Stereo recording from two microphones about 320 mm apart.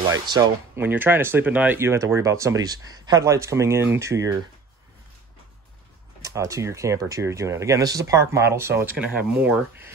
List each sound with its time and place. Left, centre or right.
0.1 s speech: centre
6.2 s speech: centre